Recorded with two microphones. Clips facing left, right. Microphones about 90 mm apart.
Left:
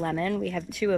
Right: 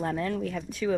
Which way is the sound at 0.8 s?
90° left.